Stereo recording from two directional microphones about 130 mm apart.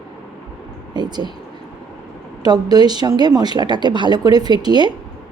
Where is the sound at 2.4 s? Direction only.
30° right (ahead or behind).